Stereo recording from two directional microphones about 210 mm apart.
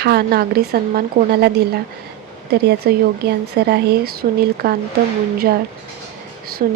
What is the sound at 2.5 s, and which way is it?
Speech, 50° right (ahead or behind).